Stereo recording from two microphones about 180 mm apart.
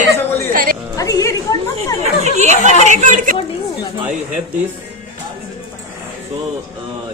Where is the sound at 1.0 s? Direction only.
20° left (ahead or behind).